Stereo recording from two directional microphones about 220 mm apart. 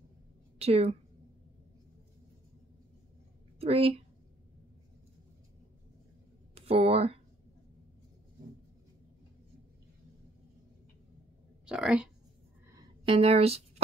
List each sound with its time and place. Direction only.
0.6 s a woman's voice: 30° right (ahead or behind)
3.5 s a woman's voice: 25° right (ahead or behind)
6.5 s speech: 25° right (ahead or behind)
11.6 s speech: 5° right (ahead or behind)
12.7 s a sound: 25° right (ahead or behind)